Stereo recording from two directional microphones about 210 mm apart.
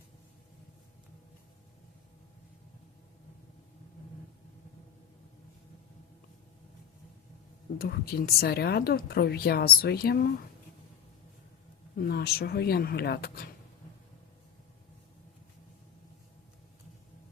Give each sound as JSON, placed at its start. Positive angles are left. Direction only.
{"t": 7.8, "sound": "speech", "side_deg": 50}
{"t": 11.9, "sound": "speech", "side_deg": 45}